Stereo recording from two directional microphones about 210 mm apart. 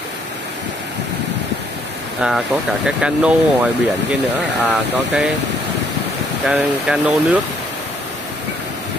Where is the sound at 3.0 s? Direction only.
5° right (ahead or behind).